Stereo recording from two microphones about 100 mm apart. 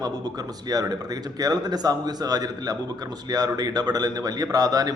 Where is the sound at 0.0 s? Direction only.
40° right (ahead or behind).